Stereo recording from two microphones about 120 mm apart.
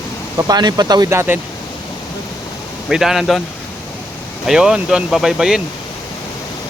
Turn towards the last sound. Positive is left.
turn(degrees=-5)  # may be behind; listen again after turning